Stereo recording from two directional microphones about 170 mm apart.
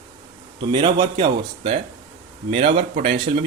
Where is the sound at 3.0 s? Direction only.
35° right (ahead or behind).